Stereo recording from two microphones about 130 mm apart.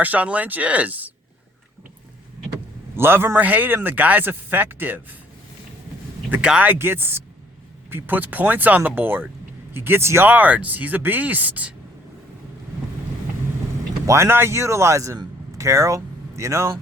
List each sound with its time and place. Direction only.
0.0 s a man's voice: 10° right (ahead or behind)
2.9 s a man's voice: 15° right (ahead or behind)
6.3 s a man's voice: 10° right (ahead or behind)
14.1 s speech: 20° right (ahead or behind)